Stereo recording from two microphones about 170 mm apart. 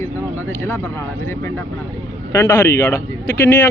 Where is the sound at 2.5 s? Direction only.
15° left (ahead or behind).